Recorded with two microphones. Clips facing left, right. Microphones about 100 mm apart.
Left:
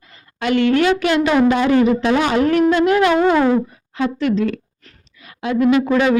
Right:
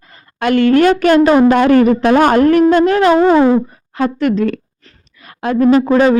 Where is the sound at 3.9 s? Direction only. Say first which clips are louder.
Right 4 dB; 50° right (ahead or behind); by 6.1 s 35° right (ahead or behind).